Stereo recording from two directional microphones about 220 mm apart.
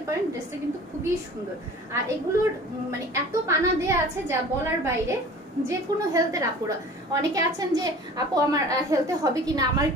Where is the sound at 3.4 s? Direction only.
10° right (ahead or behind).